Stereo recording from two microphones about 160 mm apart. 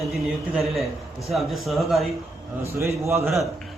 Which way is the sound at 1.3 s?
Centre (ahead or behind).